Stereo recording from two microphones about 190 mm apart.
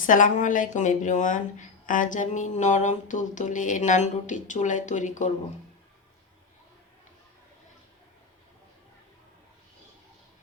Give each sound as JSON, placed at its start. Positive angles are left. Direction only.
{"t": 0.0, "sound": "speech", "side_deg": 45}